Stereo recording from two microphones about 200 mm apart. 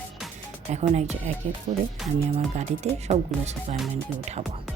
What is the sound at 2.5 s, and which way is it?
Speech, 35° right (ahead or behind).